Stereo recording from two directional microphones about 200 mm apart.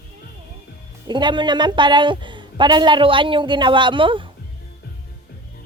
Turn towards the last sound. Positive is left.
turn(degrees=-25)  # may be behind; listen again after turning